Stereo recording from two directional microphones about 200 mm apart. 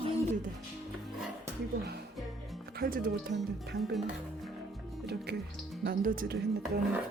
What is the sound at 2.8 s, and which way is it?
Speech, 45° right (ahead or behind).